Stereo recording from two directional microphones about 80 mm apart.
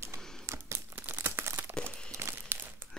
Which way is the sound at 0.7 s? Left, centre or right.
Right.